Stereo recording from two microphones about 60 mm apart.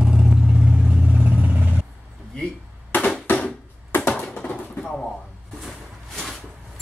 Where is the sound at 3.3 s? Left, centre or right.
Left.